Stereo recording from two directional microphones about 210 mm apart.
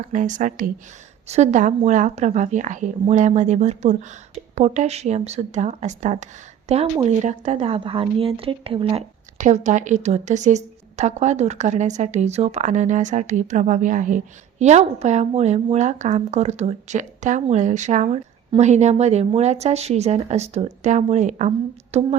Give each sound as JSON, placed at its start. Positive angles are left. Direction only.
{"t": 0.1, "sound": "a woman's voice", "side_deg": -35}